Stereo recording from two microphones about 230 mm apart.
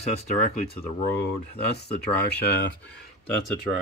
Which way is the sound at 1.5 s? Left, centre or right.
Left.